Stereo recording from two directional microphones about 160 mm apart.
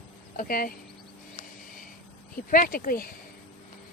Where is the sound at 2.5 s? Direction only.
60° left (ahead or behind).